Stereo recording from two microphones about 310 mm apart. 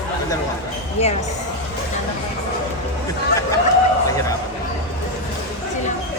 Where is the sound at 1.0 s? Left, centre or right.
Centre.